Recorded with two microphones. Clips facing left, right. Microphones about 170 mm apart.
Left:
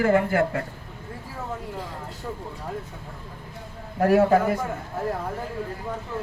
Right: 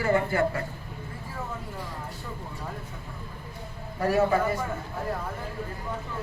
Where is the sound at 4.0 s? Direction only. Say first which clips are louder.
Left 5 dB; 60° left (ahead or behind).